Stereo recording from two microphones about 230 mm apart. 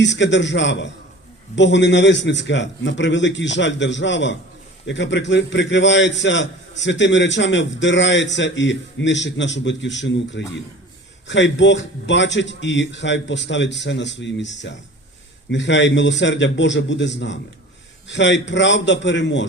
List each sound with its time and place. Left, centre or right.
0.0 s a man's voice: left